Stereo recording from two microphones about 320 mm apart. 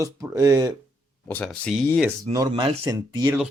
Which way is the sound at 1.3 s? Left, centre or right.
Centre.